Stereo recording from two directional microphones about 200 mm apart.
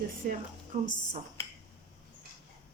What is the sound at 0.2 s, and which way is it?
Speech, 40° right (ahead or behind).